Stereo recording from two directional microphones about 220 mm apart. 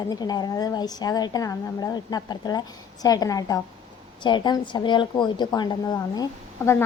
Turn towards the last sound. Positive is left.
turn(degrees=15)  # may be behind; listen again after turning